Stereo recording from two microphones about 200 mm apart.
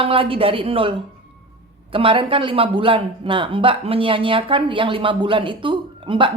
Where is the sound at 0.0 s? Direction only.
25° right (ahead or behind).